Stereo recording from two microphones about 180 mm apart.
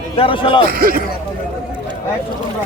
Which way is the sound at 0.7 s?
55° right (ahead or behind).